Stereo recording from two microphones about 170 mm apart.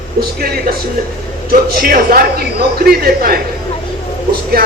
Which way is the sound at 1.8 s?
60° right (ahead or behind).